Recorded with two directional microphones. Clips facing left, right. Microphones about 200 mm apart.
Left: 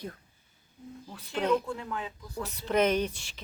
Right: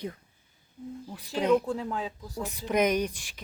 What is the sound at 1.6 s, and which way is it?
Speech, 35° right (ahead or behind).